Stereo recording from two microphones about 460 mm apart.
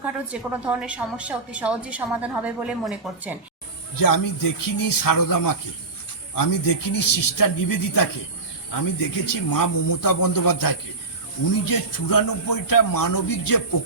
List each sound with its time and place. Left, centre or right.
0.0 s a woman's voice: centre
3.9 s speech: left